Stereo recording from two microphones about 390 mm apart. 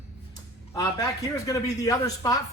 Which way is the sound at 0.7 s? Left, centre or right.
Centre.